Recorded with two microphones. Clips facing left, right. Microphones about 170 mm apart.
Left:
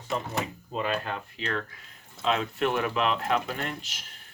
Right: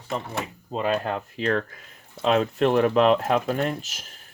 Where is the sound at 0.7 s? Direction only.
40° right (ahead or behind).